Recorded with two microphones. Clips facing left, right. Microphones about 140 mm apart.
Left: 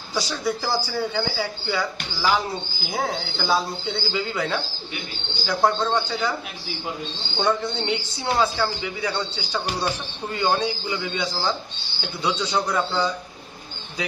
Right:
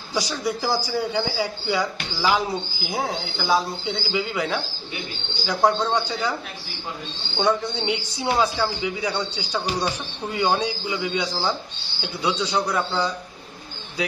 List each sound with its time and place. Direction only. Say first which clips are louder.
0.1 s a man's voice: even; 15° right (ahead or behind)
7.3 s a man's voice: right 1 dB; 10° right (ahead or behind)
10.3 s a man's voice: even; 10° right (ahead or behind)